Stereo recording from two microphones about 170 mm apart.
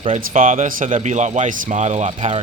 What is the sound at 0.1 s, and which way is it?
Speech, 50° right (ahead or behind).